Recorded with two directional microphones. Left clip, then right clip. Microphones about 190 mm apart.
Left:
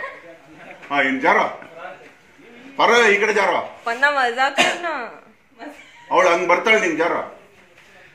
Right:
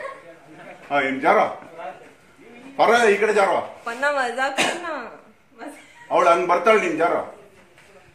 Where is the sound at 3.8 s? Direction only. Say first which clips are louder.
Left 4 dB; 10° left (ahead or behind).